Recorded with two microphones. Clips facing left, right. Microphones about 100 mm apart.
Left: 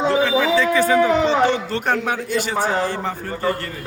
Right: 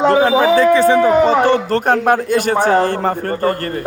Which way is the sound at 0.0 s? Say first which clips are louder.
Right 6 dB; 50° right (ahead or behind).